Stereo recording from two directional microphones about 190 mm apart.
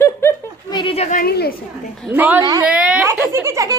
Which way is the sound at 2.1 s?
10° right (ahead or behind).